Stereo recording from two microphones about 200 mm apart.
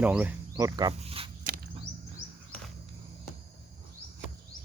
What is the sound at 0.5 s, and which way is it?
Speech, 20° right (ahead or behind).